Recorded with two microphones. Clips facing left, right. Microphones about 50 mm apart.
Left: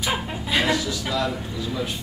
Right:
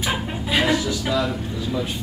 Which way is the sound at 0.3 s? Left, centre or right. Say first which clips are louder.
Right 3 dB; centre.